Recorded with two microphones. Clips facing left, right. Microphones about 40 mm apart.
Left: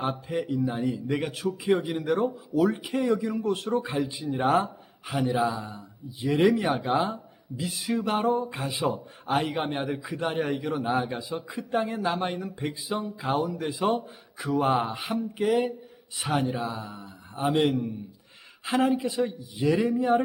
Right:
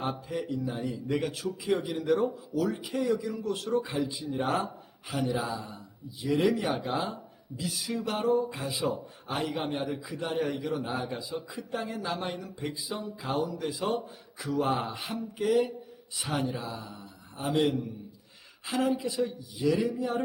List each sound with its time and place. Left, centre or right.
0.3 s a man's voice: left
2.6 s speech: left
4.4 s speech: centre
5.1 s a man's voice: left